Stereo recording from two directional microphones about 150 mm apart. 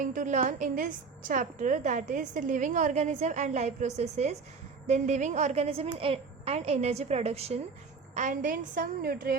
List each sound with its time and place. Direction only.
0.0 s a woman's voice: 60° right (ahead or behind); by 7.6 s 45° right (ahead or behind)
8.1 s a woman's voice: 55° right (ahead or behind); by 9.3 s 85° right